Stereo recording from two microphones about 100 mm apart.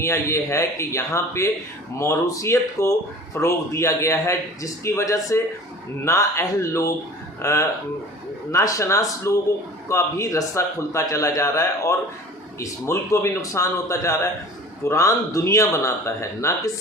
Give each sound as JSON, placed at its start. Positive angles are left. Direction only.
{"t": 0.0, "sound": "a man's voice", "side_deg": 30}